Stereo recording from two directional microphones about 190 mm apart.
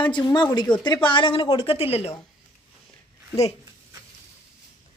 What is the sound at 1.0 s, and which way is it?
A woman's voice, 25° left (ahead or behind).